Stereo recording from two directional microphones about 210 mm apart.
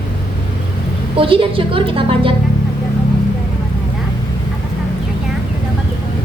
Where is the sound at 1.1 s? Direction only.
25° right (ahead or behind).